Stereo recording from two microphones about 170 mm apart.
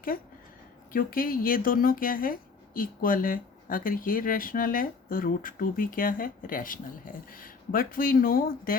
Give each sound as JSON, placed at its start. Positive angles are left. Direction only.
{"t": 0.1, "sound": "speech", "side_deg": 55}